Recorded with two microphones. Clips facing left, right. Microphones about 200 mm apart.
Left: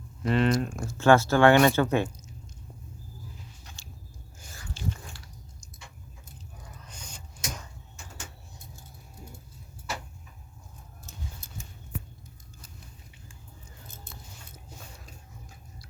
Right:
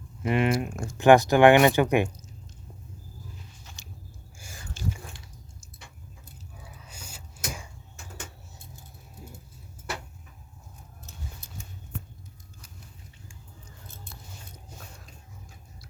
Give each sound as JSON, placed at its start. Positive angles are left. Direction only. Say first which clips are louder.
{"t": 0.2, "sound": "speech", "louder": "even", "side_deg": -10}
{"t": 4.8, "sound": "biting", "louder": "right 1 dB", "side_deg": -50}
{"t": 6.8, "sound": "a sound", "louder": "even", "side_deg": -5}